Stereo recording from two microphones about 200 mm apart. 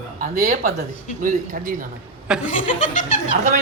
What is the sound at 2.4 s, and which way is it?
Speech, 40° left (ahead or behind).